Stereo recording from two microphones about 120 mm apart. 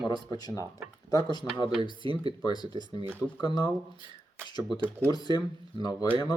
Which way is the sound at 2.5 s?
35° left (ahead or behind).